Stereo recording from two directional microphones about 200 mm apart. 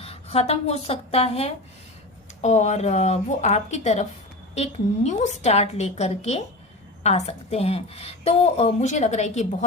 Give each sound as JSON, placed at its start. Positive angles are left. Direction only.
{"t": 0.0, "sound": "a woman's voice", "side_deg": 30}